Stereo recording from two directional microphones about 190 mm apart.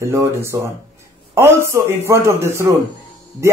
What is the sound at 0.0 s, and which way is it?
Speech, 15° right (ahead or behind).